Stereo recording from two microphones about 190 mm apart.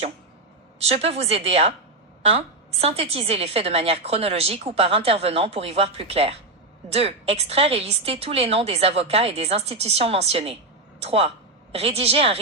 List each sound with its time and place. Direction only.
0.9 s a woman's voice: 35° right (ahead or behind)